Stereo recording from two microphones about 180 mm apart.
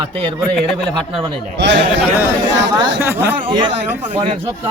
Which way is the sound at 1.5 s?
75° right (ahead or behind).